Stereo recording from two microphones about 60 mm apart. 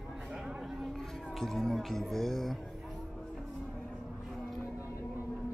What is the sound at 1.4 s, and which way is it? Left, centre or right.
A man's voice, centre.